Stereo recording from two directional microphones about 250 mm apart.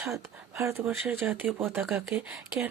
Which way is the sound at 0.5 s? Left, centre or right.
Centre.